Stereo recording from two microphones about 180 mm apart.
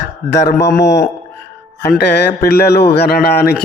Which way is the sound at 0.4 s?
65° left (ahead or behind).